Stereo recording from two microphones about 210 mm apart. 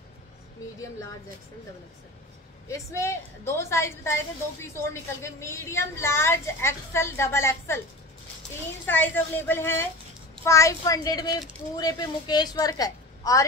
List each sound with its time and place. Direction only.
2.7 s a woman's voice: 15° left (ahead or behind)
8.8 s a woman's voice: 10° left (ahead or behind)